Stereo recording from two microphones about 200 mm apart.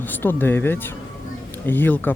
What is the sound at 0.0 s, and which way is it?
Speech, 10° left (ahead or behind).